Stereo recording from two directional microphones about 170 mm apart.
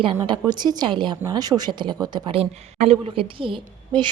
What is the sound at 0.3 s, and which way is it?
Speech, 25° right (ahead or behind).